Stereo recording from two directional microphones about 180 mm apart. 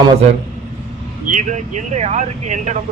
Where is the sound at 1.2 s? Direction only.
45° right (ahead or behind).